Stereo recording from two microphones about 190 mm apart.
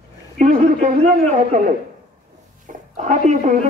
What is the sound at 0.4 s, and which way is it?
A man's voice, 35° right (ahead or behind).